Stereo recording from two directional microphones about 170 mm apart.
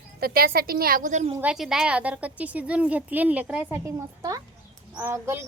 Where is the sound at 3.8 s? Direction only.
20° right (ahead or behind).